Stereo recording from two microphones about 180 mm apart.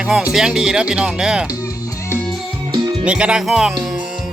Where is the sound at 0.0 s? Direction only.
5° right (ahead or behind).